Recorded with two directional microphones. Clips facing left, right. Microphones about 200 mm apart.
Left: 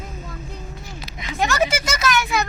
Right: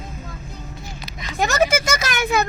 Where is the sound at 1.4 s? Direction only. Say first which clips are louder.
Right 2 dB; 40° right (ahead or behind).